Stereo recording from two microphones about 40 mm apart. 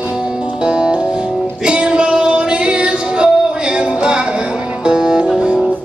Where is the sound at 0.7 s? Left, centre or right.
Right.